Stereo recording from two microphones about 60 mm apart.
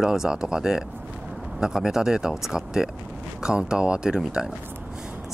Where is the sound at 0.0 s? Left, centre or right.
Centre.